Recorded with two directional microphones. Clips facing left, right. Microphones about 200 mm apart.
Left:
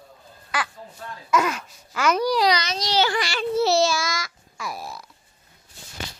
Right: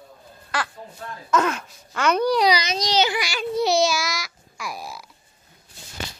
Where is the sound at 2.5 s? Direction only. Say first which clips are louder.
Right 2 dB; 20° right (ahead or behind).